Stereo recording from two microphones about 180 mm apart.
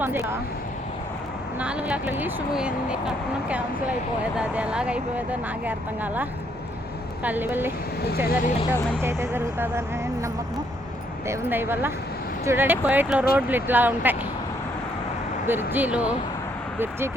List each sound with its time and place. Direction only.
0.0 s speech: 10° right (ahead or behind)
1.5 s speech: 5° right (ahead or behind)
7.3 s speech: 10° right (ahead or behind)
8.3 s speech: 50° left (ahead or behind)
9.0 s speech: 15° right (ahead or behind)
11.3 s speech: 10° right (ahead or behind)
15.4 s speech: 10° right (ahead or behind)